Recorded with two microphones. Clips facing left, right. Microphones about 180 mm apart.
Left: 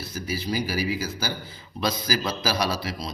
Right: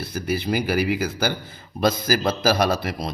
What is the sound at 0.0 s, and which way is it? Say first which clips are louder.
A man's voice: right 5 dB; 60° right (ahead or behind).